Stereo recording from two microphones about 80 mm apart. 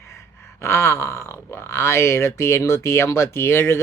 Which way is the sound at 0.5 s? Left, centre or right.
Left.